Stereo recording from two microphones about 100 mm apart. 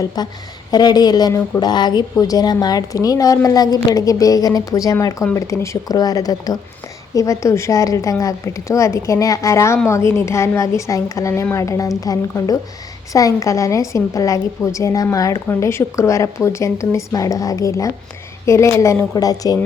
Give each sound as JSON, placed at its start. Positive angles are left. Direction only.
{"t": 0.2, "sound": "a woman's voice", "side_deg": 40}